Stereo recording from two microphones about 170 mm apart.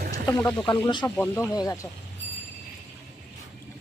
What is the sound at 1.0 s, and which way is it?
Speech, 10° left (ahead or behind).